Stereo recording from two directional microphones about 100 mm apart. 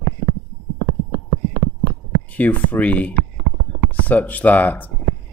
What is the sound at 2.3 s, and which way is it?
Speech, 15° left (ahead or behind).